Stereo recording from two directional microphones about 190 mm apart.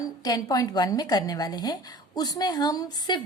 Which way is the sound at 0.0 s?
20° left (ahead or behind).